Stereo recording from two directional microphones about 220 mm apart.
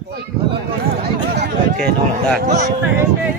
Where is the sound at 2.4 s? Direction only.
30° right (ahead or behind).